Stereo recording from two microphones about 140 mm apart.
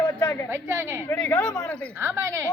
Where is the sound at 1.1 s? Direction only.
15° left (ahead or behind).